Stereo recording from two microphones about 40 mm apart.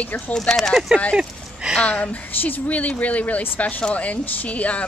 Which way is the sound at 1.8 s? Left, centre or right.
Left.